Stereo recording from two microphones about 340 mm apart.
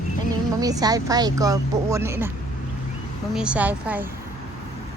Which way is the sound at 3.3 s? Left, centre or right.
Centre.